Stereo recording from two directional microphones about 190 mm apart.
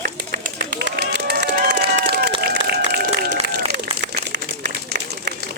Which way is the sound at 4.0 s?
65° right (ahead or behind).